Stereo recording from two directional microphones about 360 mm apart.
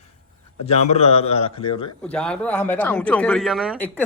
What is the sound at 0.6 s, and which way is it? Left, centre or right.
A man's voice, centre.